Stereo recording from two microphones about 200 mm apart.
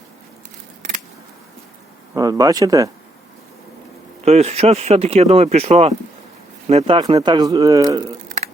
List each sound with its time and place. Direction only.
2.1 s speech: 20° right (ahead or behind)
4.3 s speech: 30° right (ahead or behind)